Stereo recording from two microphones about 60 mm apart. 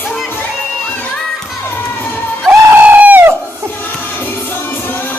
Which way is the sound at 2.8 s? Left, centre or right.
Right.